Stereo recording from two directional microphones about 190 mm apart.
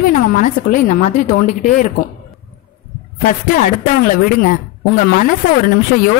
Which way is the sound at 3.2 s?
50° left (ahead or behind).